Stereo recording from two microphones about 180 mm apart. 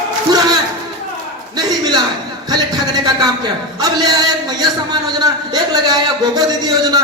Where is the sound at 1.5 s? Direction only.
20° right (ahead or behind).